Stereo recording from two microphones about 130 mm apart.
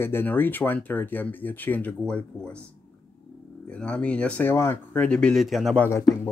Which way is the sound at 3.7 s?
10° left (ahead or behind).